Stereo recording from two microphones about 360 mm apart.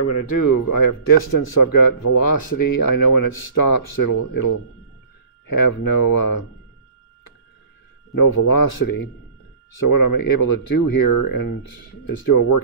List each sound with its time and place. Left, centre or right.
0.0 s a man's voice: left
8.1 s speech: left
9.8 s speech: left